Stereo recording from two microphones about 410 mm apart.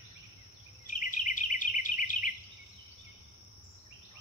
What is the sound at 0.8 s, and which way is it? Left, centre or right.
Insect, centre.